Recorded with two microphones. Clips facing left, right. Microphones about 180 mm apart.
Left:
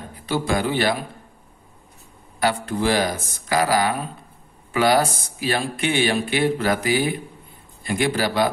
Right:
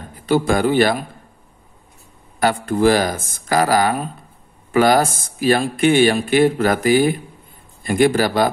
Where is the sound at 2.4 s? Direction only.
50° right (ahead or behind).